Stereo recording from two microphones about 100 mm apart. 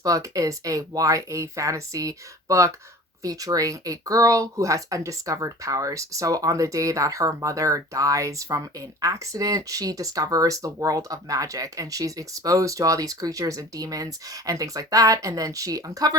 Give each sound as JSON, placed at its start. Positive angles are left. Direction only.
{"t": 0.0, "sound": "speech", "side_deg": -35}